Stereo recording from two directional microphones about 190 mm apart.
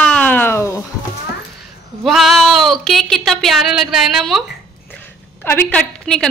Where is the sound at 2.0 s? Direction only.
Centre (ahead or behind).